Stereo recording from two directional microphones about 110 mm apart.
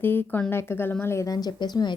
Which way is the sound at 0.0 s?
20° left (ahead or behind).